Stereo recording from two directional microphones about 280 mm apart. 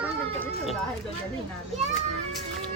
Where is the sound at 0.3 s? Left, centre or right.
Centre.